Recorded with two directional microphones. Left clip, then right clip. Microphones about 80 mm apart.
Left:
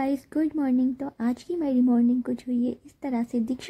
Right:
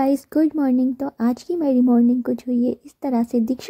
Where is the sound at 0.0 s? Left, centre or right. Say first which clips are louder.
Right 8 dB; right.